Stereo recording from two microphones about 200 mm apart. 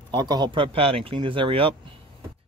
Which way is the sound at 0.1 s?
20° right (ahead or behind).